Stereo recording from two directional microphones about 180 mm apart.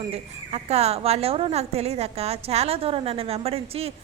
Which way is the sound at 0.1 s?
35° right (ahead or behind).